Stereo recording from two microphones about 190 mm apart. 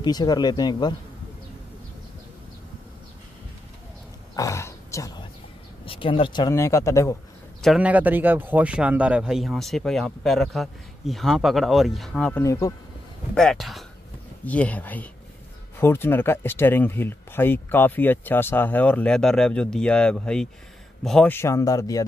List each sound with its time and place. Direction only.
0.0 s speech: 20° left (ahead or behind)
4.4 s a sound: 15° left (ahead or behind)
5.9 s speech: 25° left (ahead or behind)
7.6 s a man's voice: 5° right (ahead or behind)
12.4 s speech: 15° left (ahead or behind)
13.3 s a man's voice: 5° left (ahead or behind)